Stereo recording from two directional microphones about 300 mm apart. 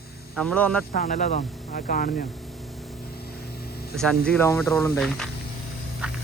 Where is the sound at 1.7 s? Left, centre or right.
Left.